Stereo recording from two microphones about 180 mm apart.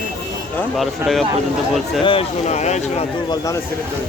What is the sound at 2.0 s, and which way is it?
Speech, 35° left (ahead or behind).